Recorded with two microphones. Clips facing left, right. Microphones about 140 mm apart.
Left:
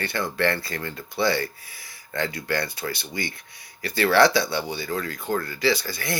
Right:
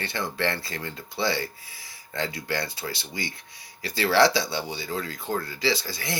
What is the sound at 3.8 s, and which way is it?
Speech, 55° left (ahead or behind).